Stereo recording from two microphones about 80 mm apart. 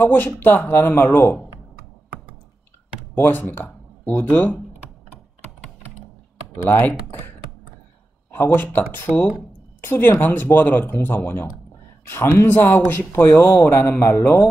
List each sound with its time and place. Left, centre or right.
0.0 s speech: left
3.2 s speech: left
6.5 s speech: left